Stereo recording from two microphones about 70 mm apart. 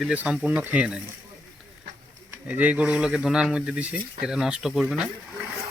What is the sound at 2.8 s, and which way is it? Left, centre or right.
Speech, centre.